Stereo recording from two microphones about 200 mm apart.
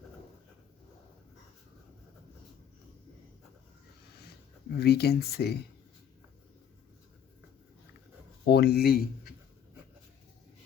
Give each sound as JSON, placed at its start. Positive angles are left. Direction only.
{"t": 4.8, "sound": "speech", "side_deg": 55}
{"t": 8.4, "sound": "speech", "side_deg": 55}